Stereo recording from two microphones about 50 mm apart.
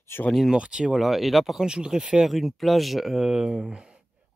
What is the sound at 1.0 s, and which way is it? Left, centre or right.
Speech, centre.